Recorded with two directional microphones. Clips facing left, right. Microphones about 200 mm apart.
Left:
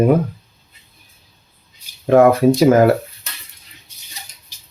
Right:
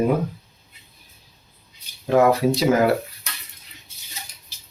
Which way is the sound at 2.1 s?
55° left (ahead or behind).